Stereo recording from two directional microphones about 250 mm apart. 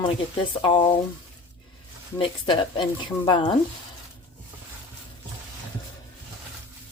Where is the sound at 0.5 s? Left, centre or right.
Centre.